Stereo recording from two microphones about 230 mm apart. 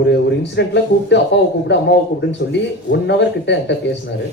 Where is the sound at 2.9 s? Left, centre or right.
Left.